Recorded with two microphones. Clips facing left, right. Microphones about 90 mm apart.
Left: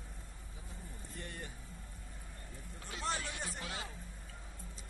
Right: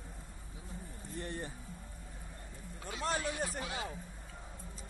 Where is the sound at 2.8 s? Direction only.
45° right (ahead or behind).